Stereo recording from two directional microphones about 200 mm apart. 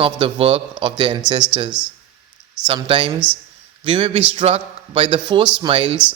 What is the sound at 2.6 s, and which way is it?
A man's voice, 25° right (ahead or behind).